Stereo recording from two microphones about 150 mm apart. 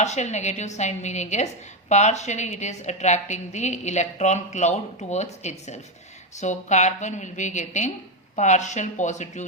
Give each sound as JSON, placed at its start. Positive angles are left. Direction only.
{"t": 0.0, "sound": "a woman's voice", "side_deg": 50}